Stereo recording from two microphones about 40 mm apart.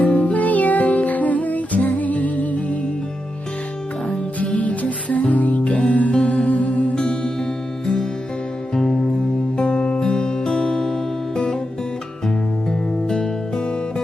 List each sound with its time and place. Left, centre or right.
0.1 s music: left
4.5 s music: left
6.9 s music: left
8.7 s music: centre
9.6 s music: left
13.1 s music: centre